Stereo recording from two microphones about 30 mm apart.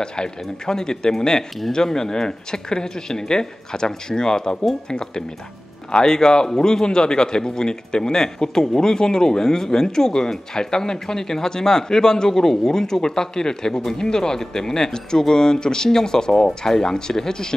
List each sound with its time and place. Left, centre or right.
0.0 s speech: left